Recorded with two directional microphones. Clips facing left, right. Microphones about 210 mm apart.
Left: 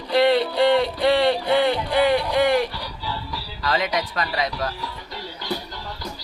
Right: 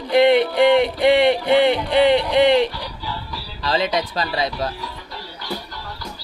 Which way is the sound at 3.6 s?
30° right (ahead or behind).